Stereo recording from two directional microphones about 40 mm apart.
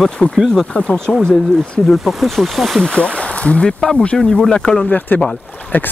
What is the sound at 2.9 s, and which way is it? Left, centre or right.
Speech, left.